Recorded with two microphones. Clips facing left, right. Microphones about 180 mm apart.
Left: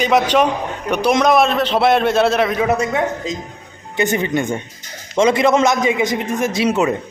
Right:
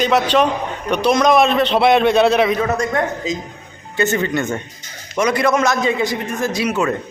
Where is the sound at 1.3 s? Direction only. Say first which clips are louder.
Right 1 dB; centre (ahead or behind).